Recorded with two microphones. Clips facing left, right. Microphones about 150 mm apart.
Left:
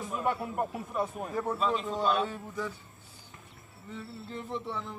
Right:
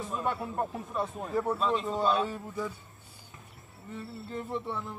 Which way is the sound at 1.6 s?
Centre (ahead or behind).